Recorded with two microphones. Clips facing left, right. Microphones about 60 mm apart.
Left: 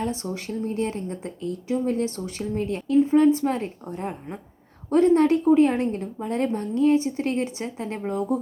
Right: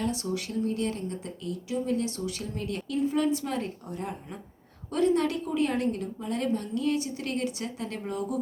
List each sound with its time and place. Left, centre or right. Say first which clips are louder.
0.0 s a woman's voice: left 2 dB; left